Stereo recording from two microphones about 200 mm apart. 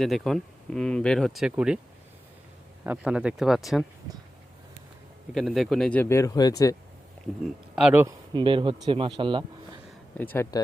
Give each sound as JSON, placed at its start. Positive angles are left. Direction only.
{"t": 0.0, "sound": "speech", "side_deg": 0}
{"t": 2.8, "sound": "speech", "side_deg": -5}
{"t": 5.3, "sound": "a man's voice", "side_deg": 0}
{"t": 7.4, "sound": "speech", "side_deg": -5}
{"t": 8.0, "sound": "speech", "side_deg": -25}
{"t": 10.3, "sound": "a man's voice", "side_deg": 15}